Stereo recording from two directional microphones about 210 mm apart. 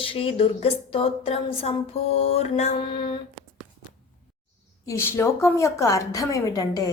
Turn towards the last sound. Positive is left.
turn(degrees=15)  # may be behind; listen again after turning